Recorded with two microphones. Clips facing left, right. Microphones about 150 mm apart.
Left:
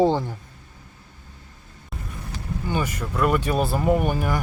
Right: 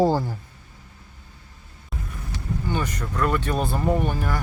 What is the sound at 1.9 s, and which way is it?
Vehicle, centre (ahead or behind).